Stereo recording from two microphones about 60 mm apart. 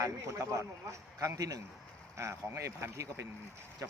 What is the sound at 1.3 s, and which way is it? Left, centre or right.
Speech, right.